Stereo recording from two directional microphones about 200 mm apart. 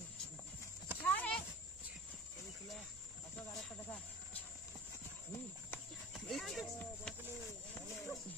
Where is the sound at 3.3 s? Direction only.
5° left (ahead or behind).